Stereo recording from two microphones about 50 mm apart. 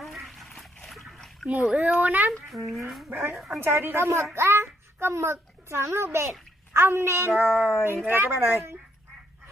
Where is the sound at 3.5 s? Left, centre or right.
Right.